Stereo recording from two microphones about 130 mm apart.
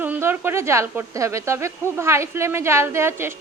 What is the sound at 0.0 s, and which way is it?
A woman's voice, 15° right (ahead or behind).